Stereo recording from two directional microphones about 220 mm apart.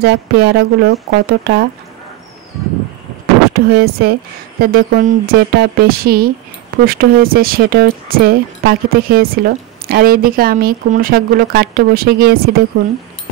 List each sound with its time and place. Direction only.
0.0 s speech: 45° right (ahead or behind)
3.5 s speech: 45° right (ahead or behind)